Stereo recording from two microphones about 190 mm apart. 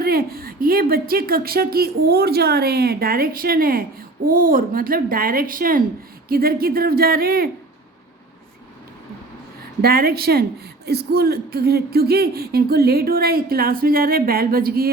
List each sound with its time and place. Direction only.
0.0 s speech: 55° right (ahead or behind)
9.8 s speech: 50° right (ahead or behind)